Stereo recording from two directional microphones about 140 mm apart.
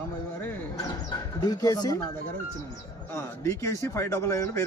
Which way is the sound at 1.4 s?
30° left (ahead or behind).